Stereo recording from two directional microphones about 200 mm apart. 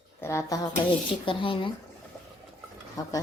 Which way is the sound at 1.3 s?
25° left (ahead or behind).